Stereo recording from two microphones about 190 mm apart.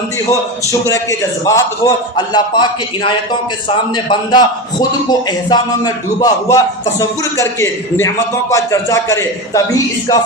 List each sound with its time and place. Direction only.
0.3 s a man's voice: 15° left (ahead or behind)